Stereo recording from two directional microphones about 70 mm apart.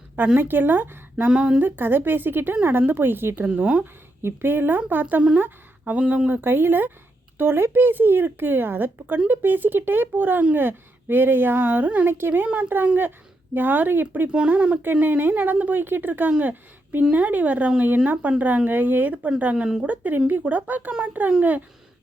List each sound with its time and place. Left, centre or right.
0.3 s speech: right
1.3 s speech: centre
1.6 s speech: right
3.5 s speech: centre
4.2 s speech: right
6.4 s speech: right
14.3 s speech: centre
15.0 s speech: right